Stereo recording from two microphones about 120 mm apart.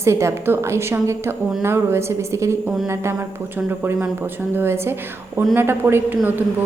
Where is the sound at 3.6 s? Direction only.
20° right (ahead or behind).